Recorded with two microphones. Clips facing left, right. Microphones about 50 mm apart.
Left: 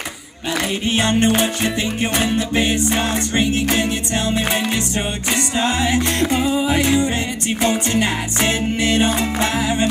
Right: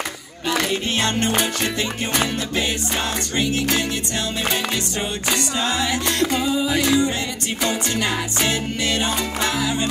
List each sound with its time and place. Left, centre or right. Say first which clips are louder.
0.7 s music: left 3 dB; left